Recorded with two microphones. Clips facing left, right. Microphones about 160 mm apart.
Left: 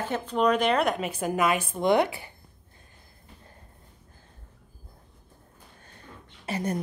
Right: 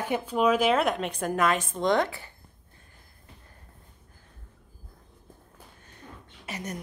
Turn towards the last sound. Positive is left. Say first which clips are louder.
# left 7 dB
turn(degrees=30)  # may be behind; listen again after turning